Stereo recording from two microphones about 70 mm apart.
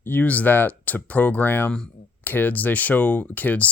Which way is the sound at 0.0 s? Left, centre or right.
Left.